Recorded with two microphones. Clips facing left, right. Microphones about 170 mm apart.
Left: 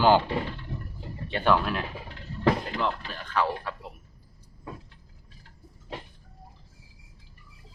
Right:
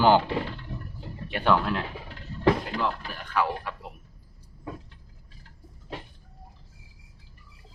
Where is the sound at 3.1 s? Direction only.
15° right (ahead or behind).